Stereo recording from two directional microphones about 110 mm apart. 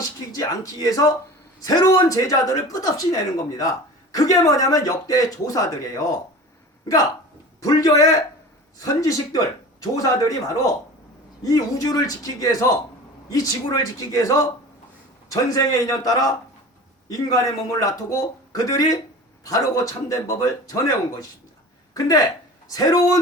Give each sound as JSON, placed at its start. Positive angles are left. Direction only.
{"t": 0.0, "sound": "speech", "side_deg": 35}
{"t": 7.6, "sound": "speech", "side_deg": 35}
{"t": 13.7, "sound": "speech", "side_deg": 35}